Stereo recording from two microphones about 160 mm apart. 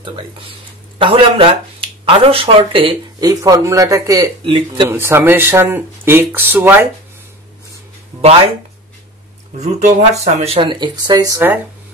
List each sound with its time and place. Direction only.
0.9 s speech: 30° right (ahead or behind)
4.5 s speech: 30° right (ahead or behind)
4.8 s speech: 15° right (ahead or behind)
9.6 s speech: 45° right (ahead or behind); by 11.3 s 25° right (ahead or behind)
11.3 s speech: 10° right (ahead or behind)